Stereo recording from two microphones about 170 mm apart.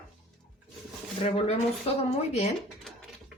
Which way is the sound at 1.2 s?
35° left (ahead or behind).